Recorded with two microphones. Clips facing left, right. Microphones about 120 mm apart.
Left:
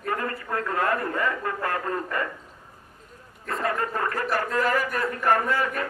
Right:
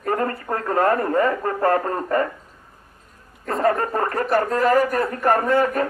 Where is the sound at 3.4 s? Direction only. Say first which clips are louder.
Right 7 dB; 35° right (ahead or behind).